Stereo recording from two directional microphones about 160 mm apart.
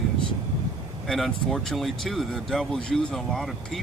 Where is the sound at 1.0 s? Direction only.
Centre (ahead or behind).